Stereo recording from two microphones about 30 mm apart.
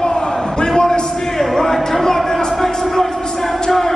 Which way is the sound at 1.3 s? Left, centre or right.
Centre.